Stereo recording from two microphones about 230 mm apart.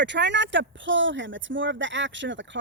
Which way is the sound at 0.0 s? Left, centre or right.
Right.